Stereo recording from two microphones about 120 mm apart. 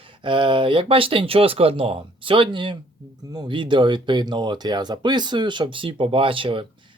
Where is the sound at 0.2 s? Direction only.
45° right (ahead or behind).